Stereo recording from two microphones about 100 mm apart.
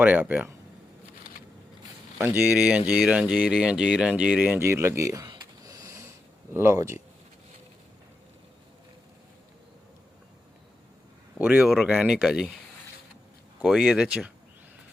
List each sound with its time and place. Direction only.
0.0 s speech: 20° right (ahead or behind)
2.1 s speech: 25° right (ahead or behind)
2.6 s speech: 15° right (ahead or behind)
4.6 s speech: 25° right (ahead or behind)
5.6 s sniff: 35° right (ahead or behind)
6.7 s speech: 25° right (ahead or behind)
11.3 s speech: 20° right (ahead or behind)
11.6 s speech: centre (ahead or behind)
11.9 s speech: 10° right (ahead or behind)
13.6 s speech: 5° right (ahead or behind)